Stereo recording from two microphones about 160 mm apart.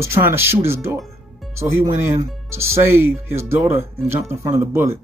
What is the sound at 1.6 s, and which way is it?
Speech, 15° right (ahead or behind).